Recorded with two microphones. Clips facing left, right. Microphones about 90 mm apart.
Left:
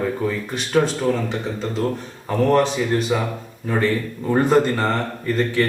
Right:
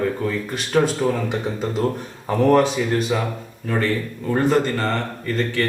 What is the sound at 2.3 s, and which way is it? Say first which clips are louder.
Speech: right 1 dB; 5° right (ahead or behind).